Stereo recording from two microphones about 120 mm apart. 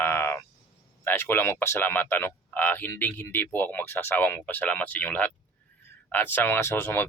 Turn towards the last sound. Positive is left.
turn(degrees=20)  # may be behind; listen again after turning